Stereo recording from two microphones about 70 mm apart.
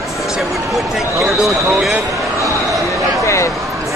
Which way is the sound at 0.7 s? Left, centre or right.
Centre.